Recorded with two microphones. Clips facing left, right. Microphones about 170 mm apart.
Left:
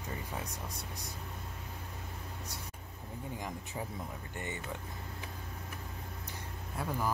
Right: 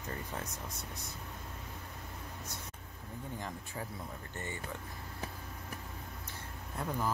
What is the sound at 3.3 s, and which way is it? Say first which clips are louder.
Speech: left 1 dB; 15° left (ahead or behind).